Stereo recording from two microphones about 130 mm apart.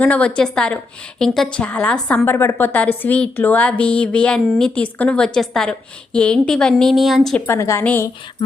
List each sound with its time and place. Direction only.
0.0 s a woman's voice: 10° left (ahead or behind)
7.4 s a woman's voice: 20° left (ahead or behind)